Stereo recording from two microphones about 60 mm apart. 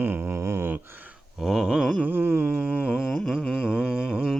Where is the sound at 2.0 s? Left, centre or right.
Right.